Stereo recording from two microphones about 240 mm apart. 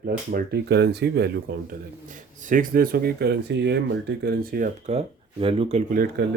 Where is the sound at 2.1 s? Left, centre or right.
Right.